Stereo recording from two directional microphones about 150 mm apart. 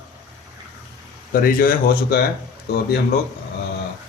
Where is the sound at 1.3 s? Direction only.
70° left (ahead or behind).